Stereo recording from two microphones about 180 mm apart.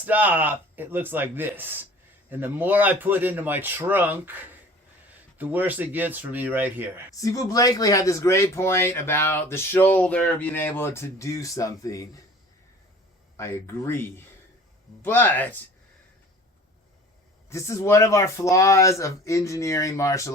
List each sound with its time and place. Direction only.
0.0 s a man's voice: 10° right (ahead or behind)
7.2 s a man's voice: 20° left (ahead or behind)
13.3 s a man's voice: 15° left (ahead or behind)
15.0 s a man's voice: 10° left (ahead or behind)
17.5 s a man's voice: 15° left (ahead or behind)